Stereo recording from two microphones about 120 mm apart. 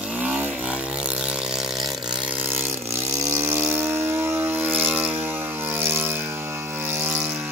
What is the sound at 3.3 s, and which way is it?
Vehicle, 20° right (ahead or behind).